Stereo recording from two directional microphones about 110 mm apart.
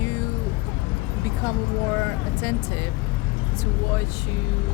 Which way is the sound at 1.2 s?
25° left (ahead or behind).